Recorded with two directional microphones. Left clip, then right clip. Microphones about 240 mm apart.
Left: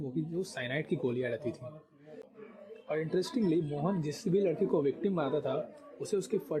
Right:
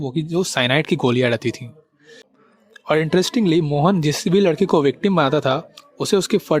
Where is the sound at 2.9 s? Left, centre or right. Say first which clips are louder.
Right 15 dB; right.